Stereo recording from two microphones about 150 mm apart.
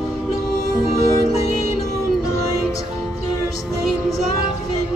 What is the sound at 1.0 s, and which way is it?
Music, 50° left (ahead or behind).